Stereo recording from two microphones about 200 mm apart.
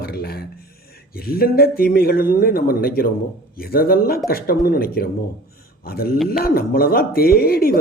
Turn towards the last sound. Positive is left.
turn(degrees=50)  # may be behind; listen again after turning